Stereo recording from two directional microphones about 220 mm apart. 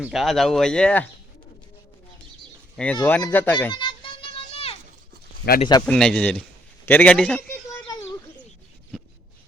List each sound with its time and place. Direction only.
0.0 s speech: centre (ahead or behind)
2.7 s a man's voice: 5° left (ahead or behind)
3.7 s a sound: 20° left (ahead or behind)
5.5 s speech: 20° left (ahead or behind)
5.8 s a man's voice: 5° left (ahead or behind)
8.9 s a sound: centre (ahead or behind)